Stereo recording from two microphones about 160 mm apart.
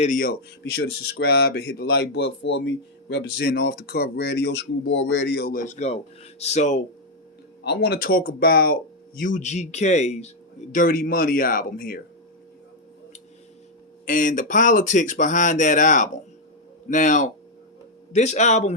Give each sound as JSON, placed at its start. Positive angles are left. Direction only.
{"t": 0.0, "sound": "speech", "side_deg": 60}
{"t": 0.8, "sound": "speech", "side_deg": 90}
{"t": 7.6, "sound": "speech", "side_deg": 90}
{"t": 14.0, "sound": "speech", "side_deg": 55}